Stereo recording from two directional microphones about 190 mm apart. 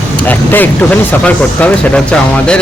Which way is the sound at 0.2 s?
10° left (ahead or behind).